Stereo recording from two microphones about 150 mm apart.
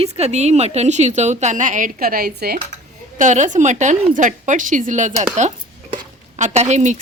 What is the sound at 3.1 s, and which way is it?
A woman's voice, 55° right (ahead or behind).